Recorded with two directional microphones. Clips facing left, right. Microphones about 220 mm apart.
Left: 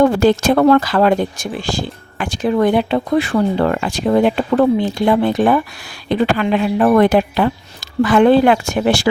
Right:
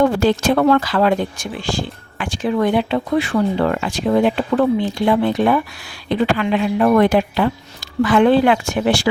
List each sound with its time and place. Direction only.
0.0 s speech: 45° left (ahead or behind)